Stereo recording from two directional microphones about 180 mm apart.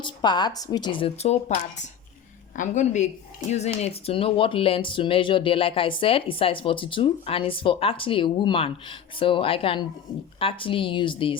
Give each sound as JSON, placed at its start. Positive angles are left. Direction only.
{"t": 0.0, "sound": "a woman's voice", "side_deg": 25}